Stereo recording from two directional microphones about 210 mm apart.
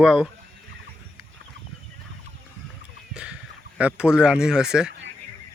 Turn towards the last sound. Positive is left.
turn(degrees=-5)  # may be behind; listen again after turning